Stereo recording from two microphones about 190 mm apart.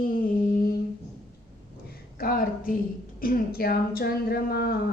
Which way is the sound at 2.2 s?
50° left (ahead or behind).